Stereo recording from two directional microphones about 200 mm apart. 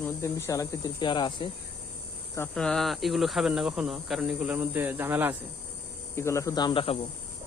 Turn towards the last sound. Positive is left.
turn(degrees=25)  # may be behind; listen again after turning